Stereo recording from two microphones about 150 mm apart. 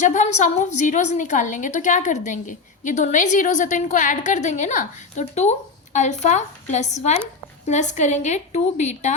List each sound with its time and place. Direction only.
0.1 s a woman's voice: 55° left (ahead or behind)